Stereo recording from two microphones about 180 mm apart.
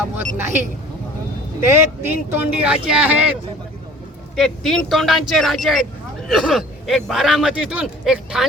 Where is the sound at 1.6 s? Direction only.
15° right (ahead or behind).